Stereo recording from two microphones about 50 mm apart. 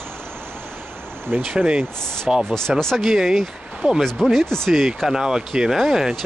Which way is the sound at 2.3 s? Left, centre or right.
Centre.